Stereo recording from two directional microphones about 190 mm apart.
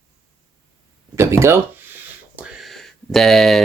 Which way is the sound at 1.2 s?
15° right (ahead or behind).